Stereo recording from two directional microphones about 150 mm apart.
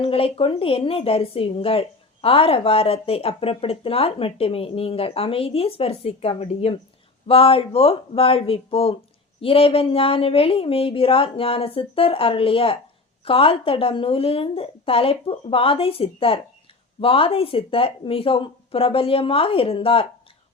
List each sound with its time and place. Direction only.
0.0 s speech: 40° left (ahead or behind)